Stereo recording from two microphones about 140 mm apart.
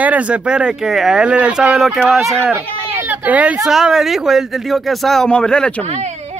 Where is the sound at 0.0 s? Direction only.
10° right (ahead or behind).